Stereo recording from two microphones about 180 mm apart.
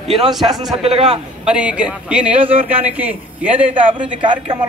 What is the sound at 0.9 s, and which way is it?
Speech, 35° right (ahead or behind).